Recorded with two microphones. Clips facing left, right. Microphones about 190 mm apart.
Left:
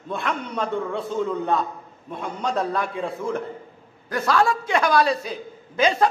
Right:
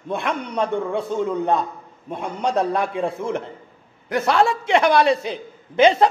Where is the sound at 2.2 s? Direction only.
20° right (ahead or behind).